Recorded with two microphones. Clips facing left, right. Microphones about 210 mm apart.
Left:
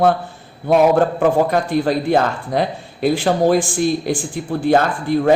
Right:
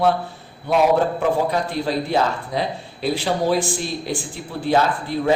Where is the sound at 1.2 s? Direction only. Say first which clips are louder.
Left 5 dB; 50° left (ahead or behind).